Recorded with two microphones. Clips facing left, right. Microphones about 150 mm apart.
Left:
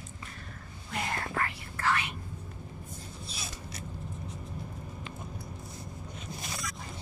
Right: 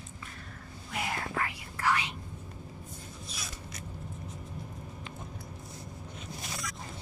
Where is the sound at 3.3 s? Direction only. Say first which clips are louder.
Left 1 dB; 30° left (ahead or behind).